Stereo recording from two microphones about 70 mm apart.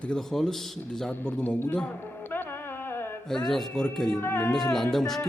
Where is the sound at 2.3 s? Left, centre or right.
Left.